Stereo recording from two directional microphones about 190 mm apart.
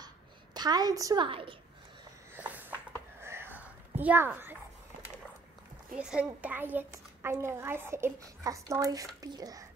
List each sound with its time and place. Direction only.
0.6 s a woman's voice: 20° right (ahead or behind)
2.3 s a sound: 10° right (ahead or behind)
5.9 s a child's voice: 5° right (ahead or behind)